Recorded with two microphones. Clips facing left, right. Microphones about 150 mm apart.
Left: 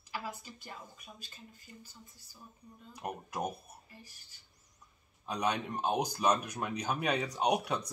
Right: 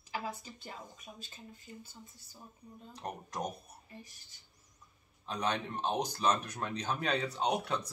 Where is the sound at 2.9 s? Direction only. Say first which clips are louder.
Left 2 dB; 10° left (ahead or behind).